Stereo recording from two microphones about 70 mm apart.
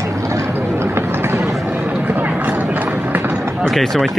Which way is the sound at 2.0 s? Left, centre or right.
Right.